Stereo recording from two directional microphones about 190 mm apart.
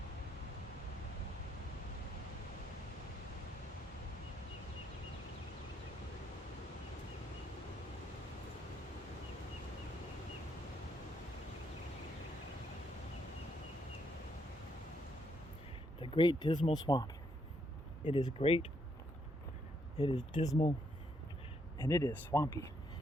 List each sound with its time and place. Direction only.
16.0 s speech: 25° left (ahead or behind)
20.1 s speech: 25° left (ahead or behind)
21.8 s speech: 15° left (ahead or behind)